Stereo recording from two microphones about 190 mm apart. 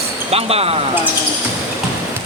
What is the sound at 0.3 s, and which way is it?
Speech, 30° right (ahead or behind).